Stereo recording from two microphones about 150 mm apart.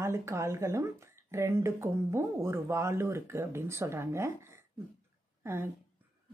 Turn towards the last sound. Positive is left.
turn(degrees=-15)  # may be behind; listen again after turning